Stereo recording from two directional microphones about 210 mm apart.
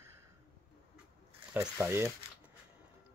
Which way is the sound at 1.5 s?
10° right (ahead or behind).